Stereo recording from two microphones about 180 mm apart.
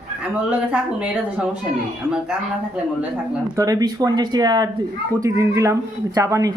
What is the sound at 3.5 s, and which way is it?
Speech, 20° right (ahead or behind).